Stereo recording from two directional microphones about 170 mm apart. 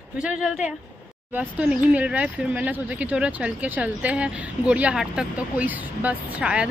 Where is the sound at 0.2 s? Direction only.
5° right (ahead or behind).